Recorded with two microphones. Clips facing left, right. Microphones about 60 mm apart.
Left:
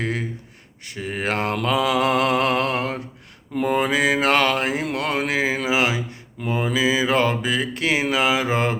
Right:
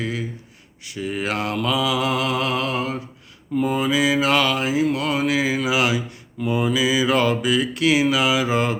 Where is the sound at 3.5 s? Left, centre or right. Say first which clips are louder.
Even; left.